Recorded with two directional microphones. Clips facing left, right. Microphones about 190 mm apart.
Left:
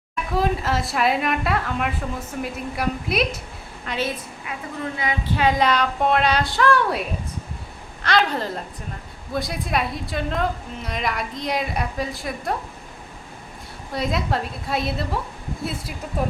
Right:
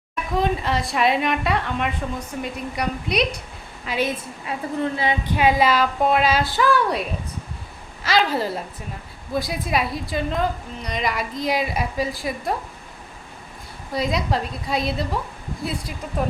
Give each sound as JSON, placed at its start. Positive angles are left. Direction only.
{"t": 0.3, "sound": "a woman's voice", "side_deg": 5}
{"t": 3.8, "sound": "a woman's voice", "side_deg": -15}
{"t": 4.4, "sound": "a woman's voice", "side_deg": -30}
{"t": 5.2, "sound": "a woman's voice", "side_deg": -15}
{"t": 8.0, "sound": "a woman's voice", "side_deg": -5}
{"t": 13.9, "sound": "a woman's voice", "side_deg": 0}